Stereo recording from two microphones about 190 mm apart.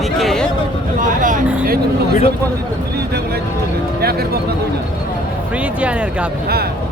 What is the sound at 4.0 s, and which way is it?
Speech, 55° right (ahead or behind).